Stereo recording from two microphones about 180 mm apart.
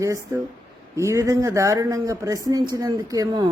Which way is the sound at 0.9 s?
15° right (ahead or behind).